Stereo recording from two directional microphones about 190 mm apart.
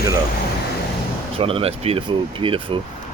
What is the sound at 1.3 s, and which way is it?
Speech, 30° right (ahead or behind).